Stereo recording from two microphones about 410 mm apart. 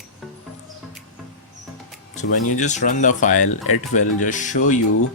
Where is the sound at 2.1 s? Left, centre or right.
Centre.